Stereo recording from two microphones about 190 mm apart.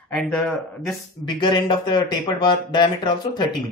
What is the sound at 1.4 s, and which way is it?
Speech, 25° left (ahead or behind).